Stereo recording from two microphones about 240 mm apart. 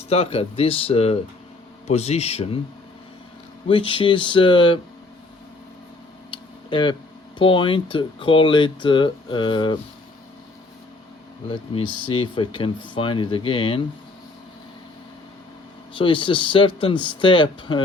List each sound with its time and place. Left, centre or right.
0.1 s speech: left
3.7 s speech: left
6.3 s tick-tock: centre
7.3 s speech: left
11.7 s speech: left
16.0 s speech: left